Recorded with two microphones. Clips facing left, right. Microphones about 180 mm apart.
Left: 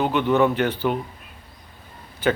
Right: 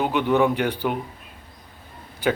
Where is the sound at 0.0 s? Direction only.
15° right (ahead or behind).